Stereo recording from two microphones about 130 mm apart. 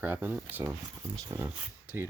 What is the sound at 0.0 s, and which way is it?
Speech, 10° right (ahead or behind).